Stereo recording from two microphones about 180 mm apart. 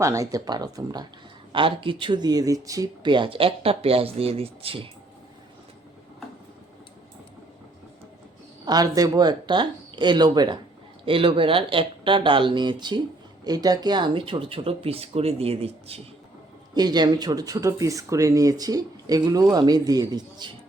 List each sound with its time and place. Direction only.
0.0 s speech: 15° right (ahead or behind)
8.6 s speech: 20° right (ahead or behind)
16.7 s speech: 25° right (ahead or behind)